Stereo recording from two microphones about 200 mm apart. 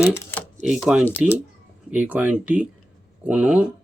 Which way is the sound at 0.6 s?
Centre (ahead or behind).